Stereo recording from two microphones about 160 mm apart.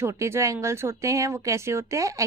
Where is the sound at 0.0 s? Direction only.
15° right (ahead or behind).